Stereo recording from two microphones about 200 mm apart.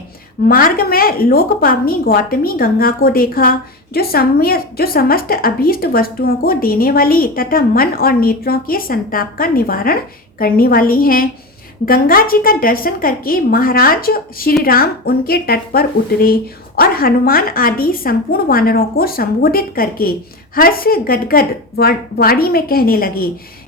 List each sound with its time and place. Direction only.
0.4 s a woman's voice: 50° left (ahead or behind)